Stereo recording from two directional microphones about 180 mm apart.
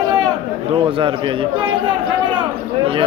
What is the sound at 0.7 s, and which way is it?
Speech, 25° right (ahead or behind).